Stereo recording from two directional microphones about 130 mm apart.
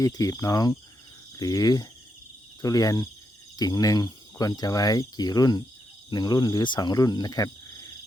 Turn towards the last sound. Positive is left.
turn(degrees=25)  # may be behind; listen again after turning